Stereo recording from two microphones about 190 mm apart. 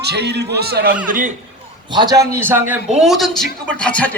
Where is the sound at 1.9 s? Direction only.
20° right (ahead or behind).